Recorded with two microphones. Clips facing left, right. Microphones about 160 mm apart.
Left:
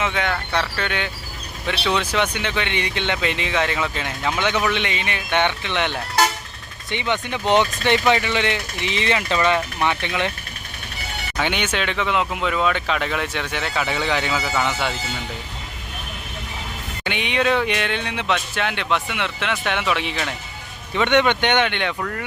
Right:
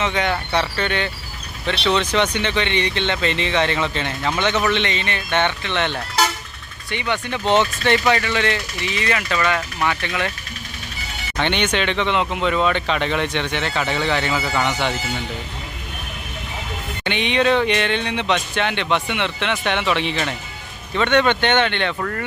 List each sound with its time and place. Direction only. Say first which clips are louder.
0.0 s speech: right 2 dB; centre (ahead or behind); by 10.3 s 20° left (ahead or behind)
11.3 s speech: right 3 dB; 5° left (ahead or behind)
17.0 s speech: right 3 dB; 5° left (ahead or behind)
20.9 s speech: right 1 dB; 15° left (ahead or behind)